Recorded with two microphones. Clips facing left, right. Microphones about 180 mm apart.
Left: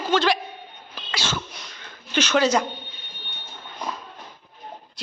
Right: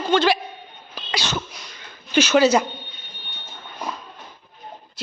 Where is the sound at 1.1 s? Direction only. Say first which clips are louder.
Right 2 dB; 15° right (ahead or behind).